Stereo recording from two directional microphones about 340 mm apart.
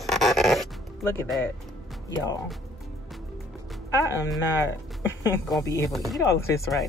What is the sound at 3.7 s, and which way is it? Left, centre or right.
Speech, centre.